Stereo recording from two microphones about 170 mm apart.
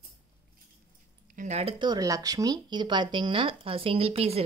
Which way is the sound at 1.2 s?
50° right (ahead or behind).